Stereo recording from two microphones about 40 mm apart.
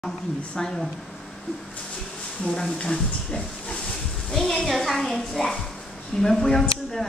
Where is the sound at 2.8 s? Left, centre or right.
Left.